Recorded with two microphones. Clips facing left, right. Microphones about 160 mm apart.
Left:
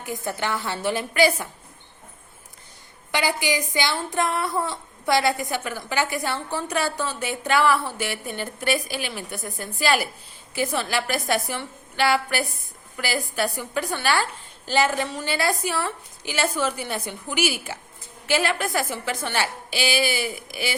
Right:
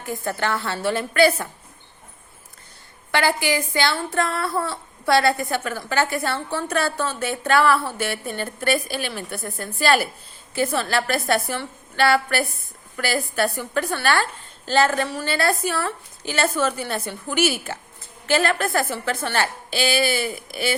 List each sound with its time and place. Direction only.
0.0 s a woman's voice: 15° left (ahead or behind)
3.1 s a woman's voice: 15° left (ahead or behind)